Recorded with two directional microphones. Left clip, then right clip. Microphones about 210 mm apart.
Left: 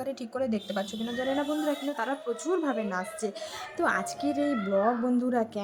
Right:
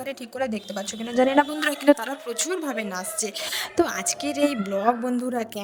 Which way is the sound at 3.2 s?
45° right (ahead or behind).